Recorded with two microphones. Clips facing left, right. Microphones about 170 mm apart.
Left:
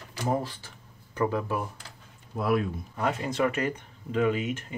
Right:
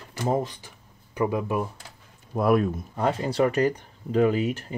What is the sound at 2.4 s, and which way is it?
Speech, 45° right (ahead or behind).